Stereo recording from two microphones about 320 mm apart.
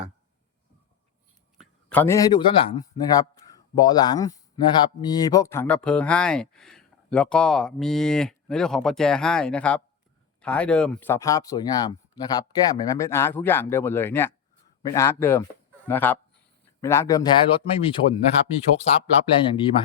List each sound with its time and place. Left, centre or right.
1.9 s a man's voice: centre